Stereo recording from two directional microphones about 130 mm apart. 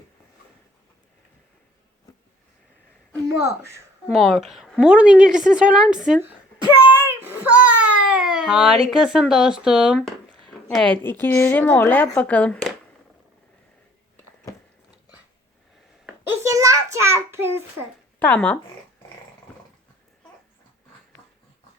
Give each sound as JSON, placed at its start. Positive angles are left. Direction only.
{"t": 4.1, "sound": "a woman's voice", "side_deg": -5}
{"t": 6.7, "sound": "a sound", "side_deg": -10}
{"t": 9.0, "sound": "a woman's voice", "side_deg": -5}
{"t": 16.3, "sound": "a child's voice", "side_deg": -25}
{"t": 18.2, "sound": "speech", "side_deg": 10}